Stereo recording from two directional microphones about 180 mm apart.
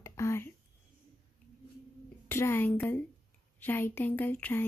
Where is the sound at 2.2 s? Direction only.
15° left (ahead or behind).